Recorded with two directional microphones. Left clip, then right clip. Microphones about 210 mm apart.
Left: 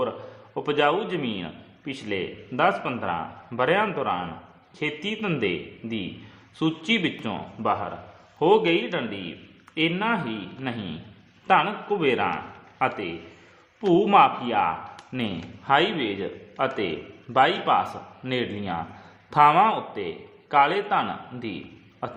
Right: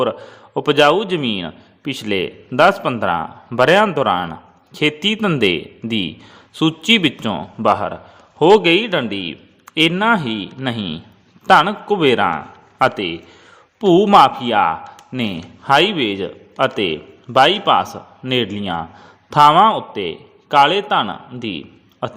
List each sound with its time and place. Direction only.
0.5 s a man's voice: 40° right (ahead or behind)